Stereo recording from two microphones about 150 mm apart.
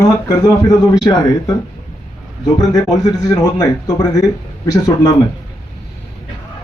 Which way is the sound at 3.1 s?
20° left (ahead or behind).